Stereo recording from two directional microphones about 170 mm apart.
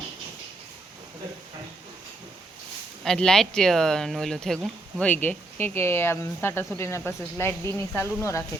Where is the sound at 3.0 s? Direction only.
5° left (ahead or behind).